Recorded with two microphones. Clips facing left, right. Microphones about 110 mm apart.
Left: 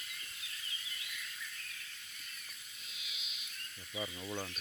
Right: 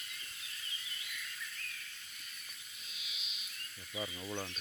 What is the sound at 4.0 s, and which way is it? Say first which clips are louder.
Speech: even; 5° left (ahead or behind).